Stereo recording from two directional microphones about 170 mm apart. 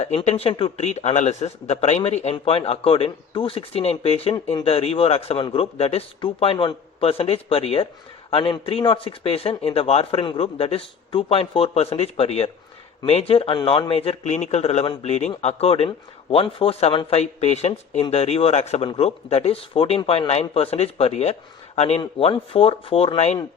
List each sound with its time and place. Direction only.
0.0 s speech: 40° left (ahead or behind)